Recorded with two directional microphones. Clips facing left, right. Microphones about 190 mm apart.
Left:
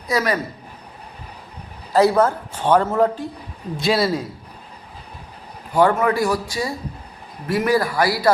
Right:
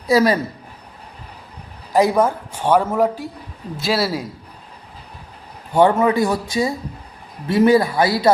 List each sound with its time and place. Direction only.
0.1 s a man's voice: 30° right (ahead or behind)
1.9 s a man's voice: 15° right (ahead or behind)
5.7 s a man's voice: 25° right (ahead or behind)